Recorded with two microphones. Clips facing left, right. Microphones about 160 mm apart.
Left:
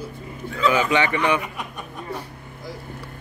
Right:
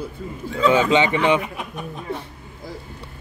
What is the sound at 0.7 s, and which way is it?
Speech, 25° right (ahead or behind).